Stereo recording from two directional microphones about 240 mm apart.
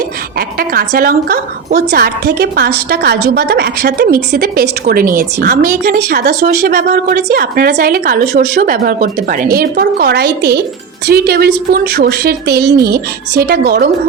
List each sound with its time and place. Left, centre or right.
0.3 s a woman's voice: right